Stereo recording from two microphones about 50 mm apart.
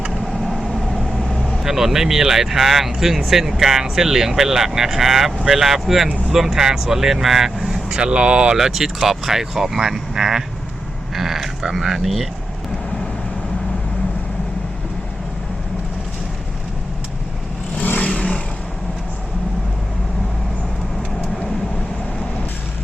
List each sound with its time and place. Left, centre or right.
0.1 s vehicle: centre
1.6 s speech: centre
17.7 s vehicle: left
18.1 s vehicle: centre